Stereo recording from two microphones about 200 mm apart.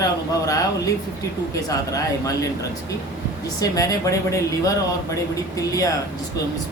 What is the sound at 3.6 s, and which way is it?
Speech, 15° left (ahead or behind).